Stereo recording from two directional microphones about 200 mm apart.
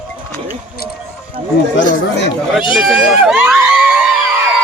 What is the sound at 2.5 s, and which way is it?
Speech, centre (ahead or behind).